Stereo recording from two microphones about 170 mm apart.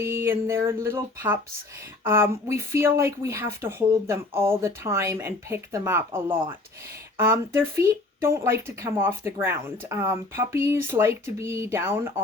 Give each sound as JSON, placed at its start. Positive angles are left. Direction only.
{"t": 0.0, "sound": "speech", "side_deg": -15}
{"t": 7.3, "sound": "speech", "side_deg": -15}